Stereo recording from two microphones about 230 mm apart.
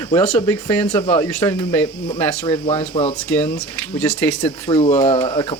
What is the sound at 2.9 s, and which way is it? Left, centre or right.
Speech, left.